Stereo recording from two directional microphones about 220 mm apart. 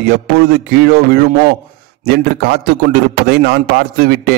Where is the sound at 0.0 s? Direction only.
45° right (ahead or behind).